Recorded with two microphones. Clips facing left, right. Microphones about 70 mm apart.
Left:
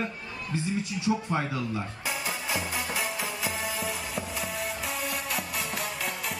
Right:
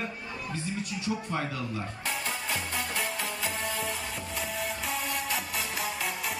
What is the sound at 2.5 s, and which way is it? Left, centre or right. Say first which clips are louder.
Music: left 3 dB; centre.